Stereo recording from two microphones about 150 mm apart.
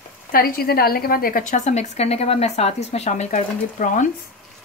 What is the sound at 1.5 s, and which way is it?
Speech, 50° left (ahead or behind).